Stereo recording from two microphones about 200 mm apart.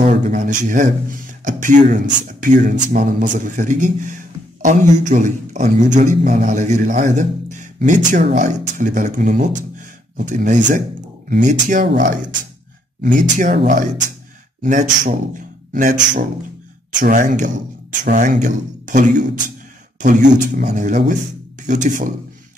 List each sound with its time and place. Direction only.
0.0 s a man's voice: 35° right (ahead or behind)
11.8 s speech: 55° right (ahead or behind)
13.0 s speech: 40° right (ahead or behind)
14.6 s a man's voice: 40° right (ahead or behind)